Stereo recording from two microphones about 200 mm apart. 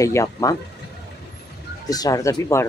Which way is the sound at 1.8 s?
20° left (ahead or behind).